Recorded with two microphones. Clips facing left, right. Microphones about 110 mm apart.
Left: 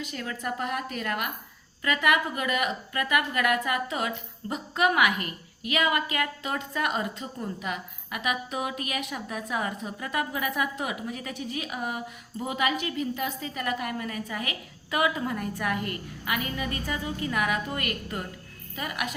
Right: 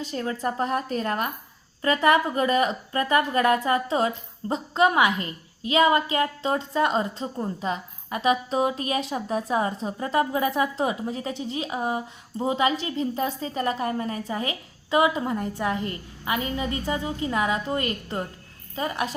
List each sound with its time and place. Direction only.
0.0 s a woman's voice: 30° right (ahead or behind)